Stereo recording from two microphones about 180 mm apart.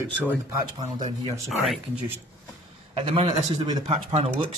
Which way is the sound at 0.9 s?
25° right (ahead or behind).